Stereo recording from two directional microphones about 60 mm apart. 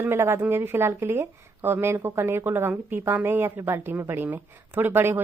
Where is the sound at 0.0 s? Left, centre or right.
Right.